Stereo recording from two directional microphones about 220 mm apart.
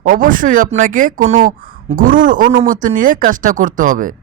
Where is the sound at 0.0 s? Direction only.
40° right (ahead or behind).